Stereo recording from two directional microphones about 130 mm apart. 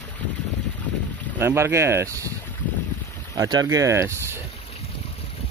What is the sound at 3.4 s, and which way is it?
Speech, 30° right (ahead or behind).